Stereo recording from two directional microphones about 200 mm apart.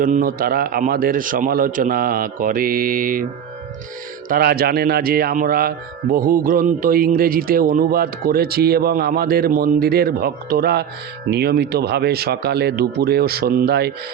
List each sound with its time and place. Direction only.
0.0 s speech: 40° right (ahead or behind)
4.3 s speech: 50° right (ahead or behind)